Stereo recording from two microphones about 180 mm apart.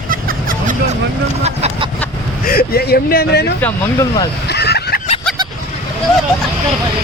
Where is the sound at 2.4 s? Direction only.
55° left (ahead or behind).